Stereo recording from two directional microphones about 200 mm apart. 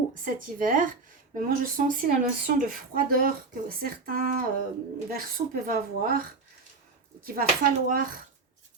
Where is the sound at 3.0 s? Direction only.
45° right (ahead or behind).